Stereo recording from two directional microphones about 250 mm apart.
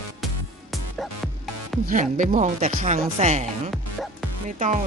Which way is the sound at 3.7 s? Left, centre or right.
Centre.